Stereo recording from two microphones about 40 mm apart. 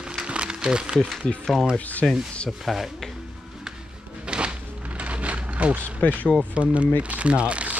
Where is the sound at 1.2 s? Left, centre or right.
Left.